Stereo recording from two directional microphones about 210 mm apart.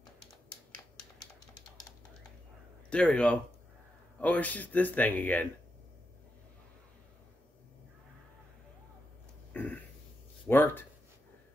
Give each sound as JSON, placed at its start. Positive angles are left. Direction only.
{"t": 2.9, "sound": "speech", "side_deg": 5}
{"t": 9.5, "sound": "a sound", "side_deg": 10}
{"t": 10.4, "sound": "speech", "side_deg": 10}